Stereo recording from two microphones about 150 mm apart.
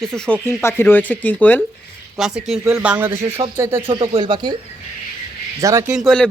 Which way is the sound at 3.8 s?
35° right (ahead or behind).